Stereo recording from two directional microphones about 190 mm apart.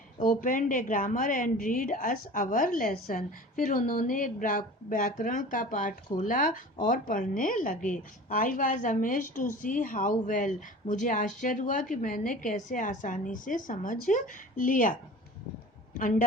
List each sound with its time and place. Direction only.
0.2 s a woman's voice: 45° left (ahead or behind)
16.0 s speech: 45° left (ahead or behind)